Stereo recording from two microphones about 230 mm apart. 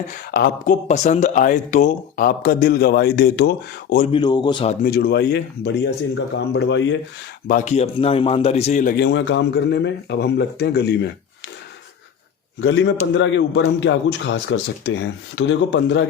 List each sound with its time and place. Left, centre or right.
0.1 s speech: left
4.1 s a man's voice: centre
4.9 s a man's voice: left
7.4 s a man's voice: left
12.5 s a man's voice: left